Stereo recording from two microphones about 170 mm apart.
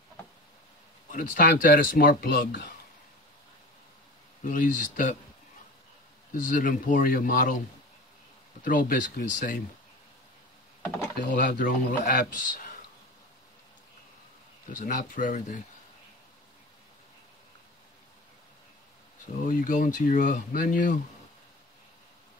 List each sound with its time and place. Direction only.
1.1 s speech: 50° left (ahead or behind); by 2.7 s 75° left (ahead or behind)
4.4 s speech: 50° left (ahead or behind)
6.3 s speech: 50° left (ahead or behind)
8.6 s speech: 50° left (ahead or behind)
11.3 s speech: 50° left (ahead or behind)
14.7 s speech: 50° left (ahead or behind)
19.4 s speech: 50° left (ahead or behind)